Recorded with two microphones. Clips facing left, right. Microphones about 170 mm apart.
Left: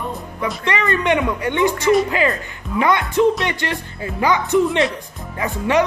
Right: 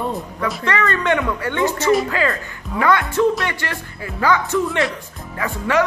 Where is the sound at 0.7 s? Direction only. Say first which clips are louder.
Left 1 dB; 15° left (ahead or behind).